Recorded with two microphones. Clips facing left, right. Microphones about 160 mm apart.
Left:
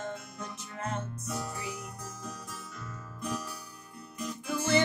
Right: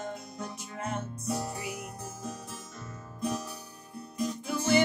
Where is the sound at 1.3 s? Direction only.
30° right (ahead or behind).